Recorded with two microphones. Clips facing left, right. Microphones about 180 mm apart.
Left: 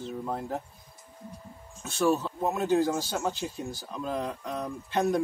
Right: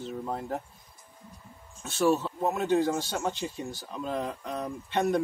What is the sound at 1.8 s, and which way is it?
Speech, centre (ahead or behind).